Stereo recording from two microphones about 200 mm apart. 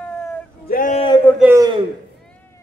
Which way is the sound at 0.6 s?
45° left (ahead or behind).